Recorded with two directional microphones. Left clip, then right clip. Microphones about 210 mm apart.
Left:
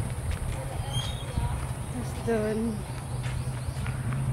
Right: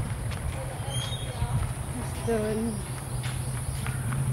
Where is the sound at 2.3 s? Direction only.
15° left (ahead or behind).